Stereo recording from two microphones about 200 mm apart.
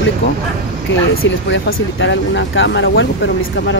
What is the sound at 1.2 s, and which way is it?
Speech, 75° left (ahead or behind).